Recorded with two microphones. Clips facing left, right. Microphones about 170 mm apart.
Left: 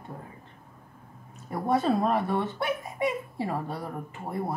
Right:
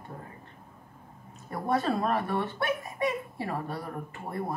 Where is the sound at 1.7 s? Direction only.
20° left (ahead or behind).